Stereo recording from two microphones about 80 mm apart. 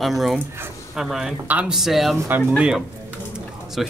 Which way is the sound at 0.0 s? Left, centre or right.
Centre.